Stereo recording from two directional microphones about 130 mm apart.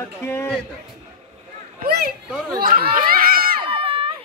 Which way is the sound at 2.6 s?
90° right.